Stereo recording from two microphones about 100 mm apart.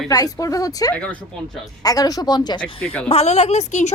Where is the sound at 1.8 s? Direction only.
40° left (ahead or behind).